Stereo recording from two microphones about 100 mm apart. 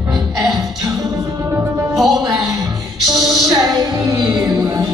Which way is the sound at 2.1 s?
45° right (ahead or behind).